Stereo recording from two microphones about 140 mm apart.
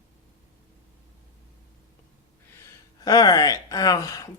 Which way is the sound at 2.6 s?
25° left (ahead or behind).